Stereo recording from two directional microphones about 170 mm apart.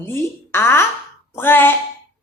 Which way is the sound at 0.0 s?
15° left (ahead or behind).